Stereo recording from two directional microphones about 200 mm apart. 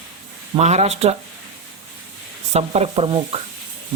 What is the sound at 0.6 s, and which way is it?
Speech, 35° right (ahead or behind).